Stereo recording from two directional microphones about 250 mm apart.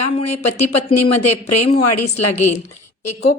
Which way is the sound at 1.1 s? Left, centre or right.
Left.